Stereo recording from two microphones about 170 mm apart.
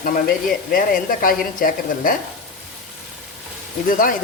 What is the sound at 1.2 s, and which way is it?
Speech, 55° left (ahead or behind).